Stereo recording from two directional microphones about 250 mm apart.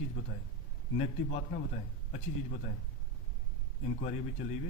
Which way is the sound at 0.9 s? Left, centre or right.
Left.